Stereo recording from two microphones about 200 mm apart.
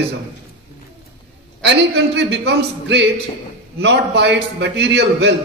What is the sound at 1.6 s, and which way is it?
A man's voice, 60° right (ahead or behind).